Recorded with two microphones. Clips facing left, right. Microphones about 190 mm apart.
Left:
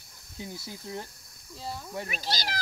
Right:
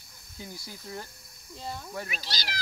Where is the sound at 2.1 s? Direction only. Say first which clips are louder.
Left 5 dB; 50° left (ahead or behind).